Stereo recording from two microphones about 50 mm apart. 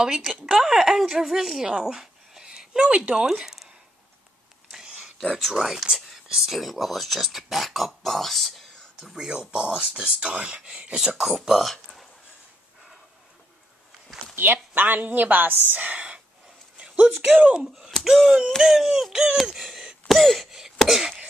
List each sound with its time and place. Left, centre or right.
0.0 s speech: centre
3.3 s speech: centre
4.6 s a sound: centre
5.4 s speech: centre
9.1 s speech: centre
11.1 s speech: centre
14.3 s a woman's voice: right
16.7 s a sound: right
17.4 s speech: right
18.0 s speech: centre
19.3 s a sound: centre
20.1 s a sound: centre